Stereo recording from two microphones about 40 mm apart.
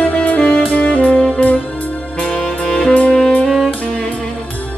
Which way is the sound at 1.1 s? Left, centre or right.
Left.